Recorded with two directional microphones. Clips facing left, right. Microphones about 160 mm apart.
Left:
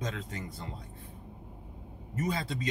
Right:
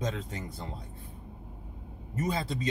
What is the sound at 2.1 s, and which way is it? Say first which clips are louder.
Speech: right 2 dB; 30° right (ahead or behind).